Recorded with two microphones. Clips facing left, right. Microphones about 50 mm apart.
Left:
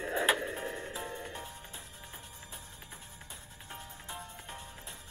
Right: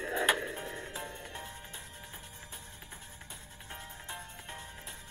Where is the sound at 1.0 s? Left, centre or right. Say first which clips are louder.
Left 2 dB; left.